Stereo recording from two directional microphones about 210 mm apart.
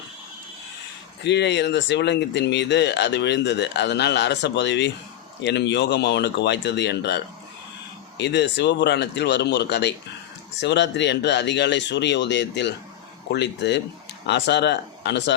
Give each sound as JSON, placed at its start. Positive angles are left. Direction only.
{"t": 1.2, "sound": "speech", "side_deg": 55}
{"t": 8.2, "sound": "speech", "side_deg": 55}